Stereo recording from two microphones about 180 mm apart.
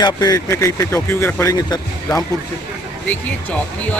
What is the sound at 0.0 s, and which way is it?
Speech, 20° left (ahead or behind).